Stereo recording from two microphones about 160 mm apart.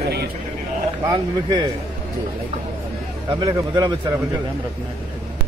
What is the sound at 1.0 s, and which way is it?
Speech, 25° right (ahead or behind).